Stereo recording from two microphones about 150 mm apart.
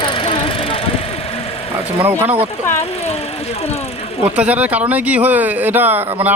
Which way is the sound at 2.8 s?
45° left (ahead or behind).